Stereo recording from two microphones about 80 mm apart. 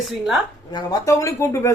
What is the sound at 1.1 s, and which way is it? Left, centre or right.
Speech, left.